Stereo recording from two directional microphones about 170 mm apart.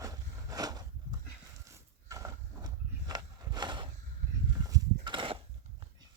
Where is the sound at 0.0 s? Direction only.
20° right (ahead or behind).